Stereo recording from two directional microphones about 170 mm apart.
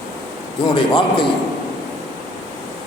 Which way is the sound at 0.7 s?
30° left (ahead or behind).